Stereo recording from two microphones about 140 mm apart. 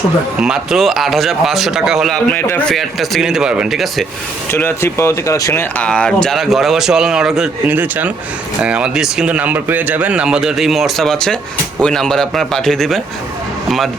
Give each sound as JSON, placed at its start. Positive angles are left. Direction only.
{"t": 0.3, "sound": "a man's voice", "side_deg": -5}
{"t": 4.5, "sound": "speech", "side_deg": 15}
{"t": 5.8, "sound": "a man's voice", "side_deg": 5}